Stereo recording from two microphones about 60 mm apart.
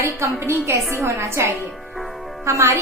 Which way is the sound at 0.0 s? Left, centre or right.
Right.